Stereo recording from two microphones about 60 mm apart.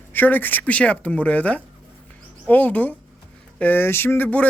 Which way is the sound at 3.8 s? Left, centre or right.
Left.